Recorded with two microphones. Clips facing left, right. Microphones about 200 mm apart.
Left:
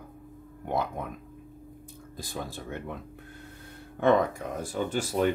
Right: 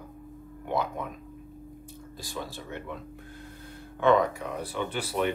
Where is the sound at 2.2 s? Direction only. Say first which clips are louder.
Left 1 dB; 50° left (ahead or behind).